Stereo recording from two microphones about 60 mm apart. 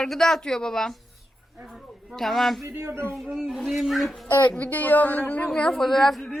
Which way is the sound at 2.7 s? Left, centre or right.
Right.